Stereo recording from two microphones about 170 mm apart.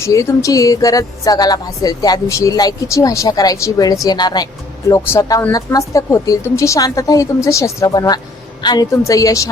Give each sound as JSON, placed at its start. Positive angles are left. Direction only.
{"t": 0.0, "sound": "a woman's voice", "side_deg": 20}